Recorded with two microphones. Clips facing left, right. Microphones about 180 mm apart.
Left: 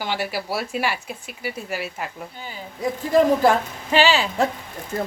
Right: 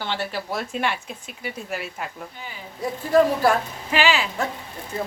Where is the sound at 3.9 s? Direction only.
30° left (ahead or behind).